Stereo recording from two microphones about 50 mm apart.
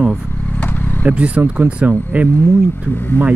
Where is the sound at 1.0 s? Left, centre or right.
Right.